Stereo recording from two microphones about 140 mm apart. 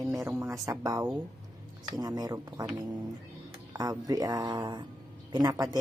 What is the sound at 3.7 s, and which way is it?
Speech, 25° right (ahead or behind).